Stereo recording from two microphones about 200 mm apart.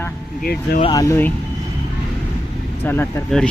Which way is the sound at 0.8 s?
20° left (ahead or behind).